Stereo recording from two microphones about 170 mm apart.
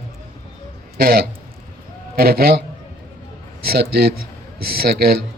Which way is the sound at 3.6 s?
65° right (ahead or behind).